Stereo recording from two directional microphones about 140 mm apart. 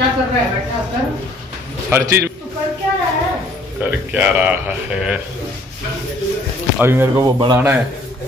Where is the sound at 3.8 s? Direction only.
10° right (ahead or behind).